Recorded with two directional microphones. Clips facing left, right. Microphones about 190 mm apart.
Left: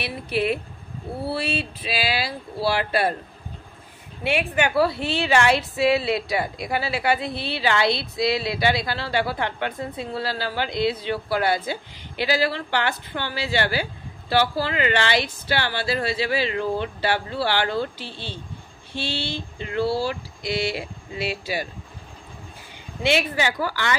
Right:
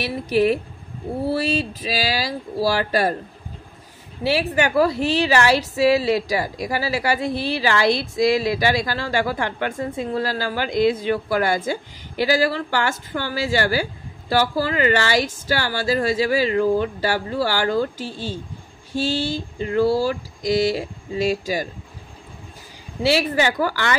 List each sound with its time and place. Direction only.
0.0 s a woman's voice: 40° right (ahead or behind)
4.2 s a woman's voice: 35° right (ahead or behind)
23.0 s a woman's voice: 40° right (ahead or behind)